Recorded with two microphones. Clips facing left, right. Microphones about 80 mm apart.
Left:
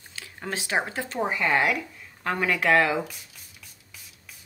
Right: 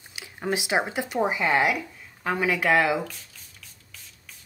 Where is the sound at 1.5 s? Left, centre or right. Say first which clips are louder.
Right 1 dB; centre.